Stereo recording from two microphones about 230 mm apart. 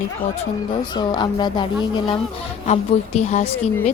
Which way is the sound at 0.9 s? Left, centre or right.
Centre.